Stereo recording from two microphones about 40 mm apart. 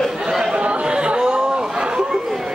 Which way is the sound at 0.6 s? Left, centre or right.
Right.